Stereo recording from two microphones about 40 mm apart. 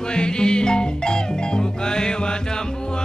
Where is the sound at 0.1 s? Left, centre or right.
Left.